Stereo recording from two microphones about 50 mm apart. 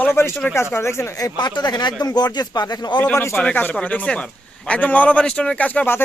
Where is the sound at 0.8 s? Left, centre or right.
Left.